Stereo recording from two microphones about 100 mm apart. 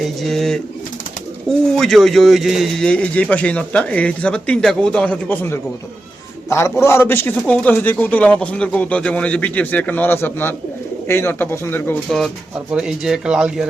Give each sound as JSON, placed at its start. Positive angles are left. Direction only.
{"t": 0.0, "sound": "speech", "side_deg": 0}
{"t": 12.7, "sound": "speech", "side_deg": -5}